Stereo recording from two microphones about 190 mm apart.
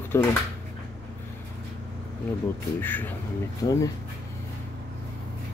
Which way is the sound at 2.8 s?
10° left (ahead or behind).